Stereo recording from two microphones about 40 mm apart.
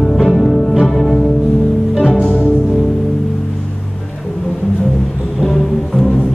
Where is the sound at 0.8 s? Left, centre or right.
Centre.